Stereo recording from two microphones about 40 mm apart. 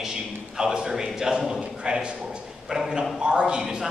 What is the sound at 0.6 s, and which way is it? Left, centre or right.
A man's voice, centre.